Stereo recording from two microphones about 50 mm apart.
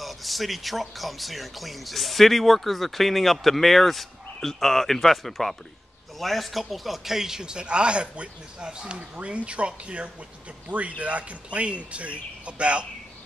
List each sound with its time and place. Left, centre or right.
0.0 s speech: centre; by 12.8 s right